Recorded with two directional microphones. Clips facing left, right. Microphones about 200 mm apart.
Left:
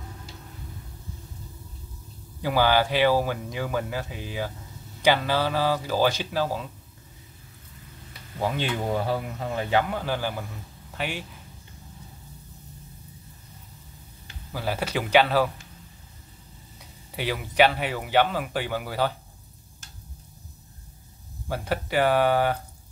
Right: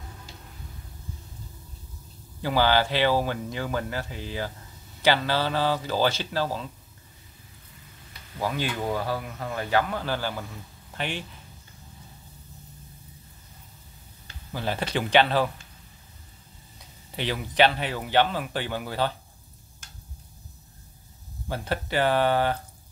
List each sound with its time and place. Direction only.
2.4 s speech: 10° left (ahead or behind)
8.4 s a man's voice: 25° left (ahead or behind); by 11.2 s 5° left (ahead or behind)
14.5 s speech: 5° left (ahead or behind)
17.1 s speech: 5° left (ahead or behind)
21.5 s speech: 10° left (ahead or behind)